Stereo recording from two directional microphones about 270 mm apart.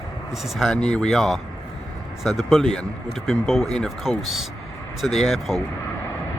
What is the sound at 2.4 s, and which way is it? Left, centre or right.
Speech, centre.